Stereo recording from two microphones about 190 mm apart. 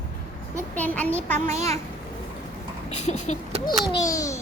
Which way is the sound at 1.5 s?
35° right (ahead or behind).